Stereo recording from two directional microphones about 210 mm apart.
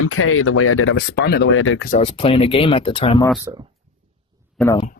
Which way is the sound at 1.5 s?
75° left (ahead or behind).